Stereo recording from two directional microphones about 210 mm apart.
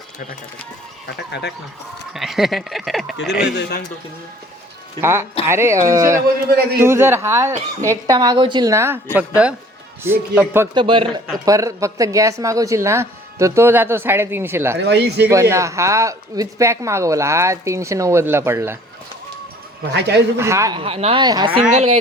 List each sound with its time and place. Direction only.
1.0 s speech: 55° left (ahead or behind)
2.1 s speech: centre (ahead or behind)
3.5 s speech: 45° left (ahead or behind)
4.9 s speech: 10° right (ahead or behind)
6.2 s speech: 50° right (ahead or behind)
6.7 s speech: 10° right (ahead or behind)
10.8 s speech: 25° right (ahead or behind)
14.8 s speech: 55° right (ahead or behind)
15.3 s speech: 15° right (ahead or behind)
19.9 s speech: 55° right (ahead or behind)
20.4 s speech: 15° right (ahead or behind)
21.7 s speech: 30° right (ahead or behind)